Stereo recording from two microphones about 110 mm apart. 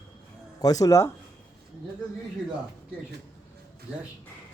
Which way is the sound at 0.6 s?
35° left (ahead or behind).